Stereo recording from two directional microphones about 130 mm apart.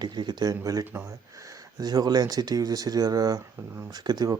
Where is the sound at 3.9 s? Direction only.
30° right (ahead or behind).